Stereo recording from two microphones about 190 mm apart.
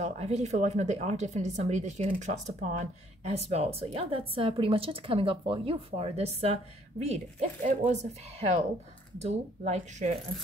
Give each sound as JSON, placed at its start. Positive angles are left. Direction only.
{"t": 0.0, "sound": "speech", "side_deg": -35}